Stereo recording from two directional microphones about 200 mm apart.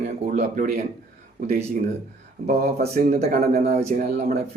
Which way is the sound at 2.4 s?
50° right (ahead or behind).